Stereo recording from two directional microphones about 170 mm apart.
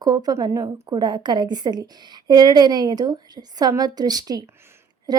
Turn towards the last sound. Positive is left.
turn(degrees=-20)  # may be behind; listen again after turning